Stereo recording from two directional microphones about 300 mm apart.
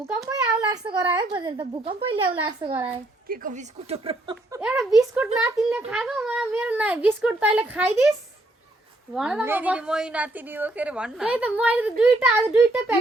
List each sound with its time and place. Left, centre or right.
0.0 s a child's voice: centre
3.2 s speech: right
4.6 s a woman's voice: centre
9.1 s a woman's voice: centre